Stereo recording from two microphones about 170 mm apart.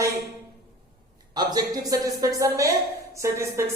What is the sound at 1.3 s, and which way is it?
Speech, 20° right (ahead or behind).